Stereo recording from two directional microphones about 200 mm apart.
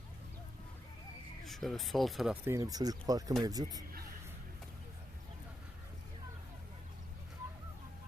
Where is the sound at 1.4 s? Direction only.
Centre (ahead or behind).